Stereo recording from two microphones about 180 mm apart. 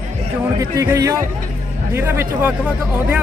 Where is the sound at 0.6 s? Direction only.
20° right (ahead or behind).